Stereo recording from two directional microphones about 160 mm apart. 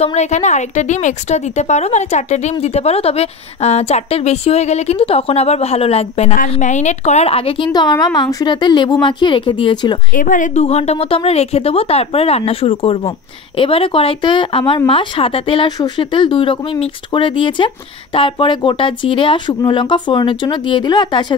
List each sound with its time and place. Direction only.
0.0 s a woman's voice: 45° left (ahead or behind)
10.1 s speech: 55° left (ahead or behind); by 21.4 s 25° left (ahead or behind)